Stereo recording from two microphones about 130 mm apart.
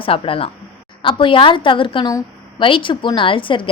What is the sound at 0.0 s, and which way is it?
A woman's voice, 45° left (ahead or behind).